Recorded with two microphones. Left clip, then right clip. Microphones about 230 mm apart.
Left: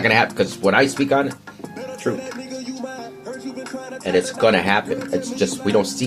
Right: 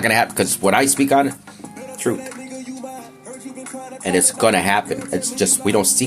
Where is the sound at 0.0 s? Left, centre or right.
Right.